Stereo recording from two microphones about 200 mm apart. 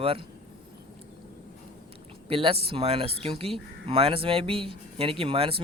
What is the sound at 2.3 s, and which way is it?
Speech, 30° right (ahead or behind).